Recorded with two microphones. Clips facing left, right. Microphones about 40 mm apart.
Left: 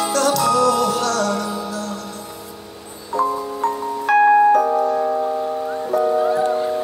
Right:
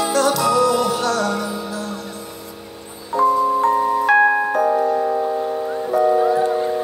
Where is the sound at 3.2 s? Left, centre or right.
Centre.